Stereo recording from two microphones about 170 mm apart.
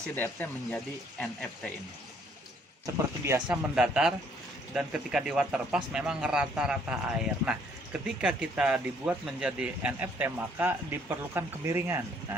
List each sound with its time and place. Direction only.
0.2 s speech: 10° left (ahead or behind)
2.8 s speech: 20° right (ahead or behind)
3.8 s speech: 5° right (ahead or behind)